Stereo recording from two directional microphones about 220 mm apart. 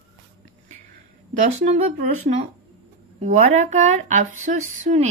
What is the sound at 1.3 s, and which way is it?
Speech, 35° right (ahead or behind).